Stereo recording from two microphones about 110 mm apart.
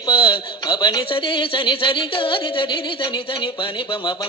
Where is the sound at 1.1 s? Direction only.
50° left (ahead or behind).